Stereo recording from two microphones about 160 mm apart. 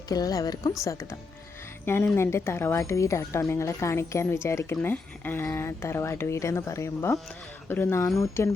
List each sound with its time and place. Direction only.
0.1 s a woman's voice: 20° left (ahead or behind)
1.8 s speech: 15° left (ahead or behind)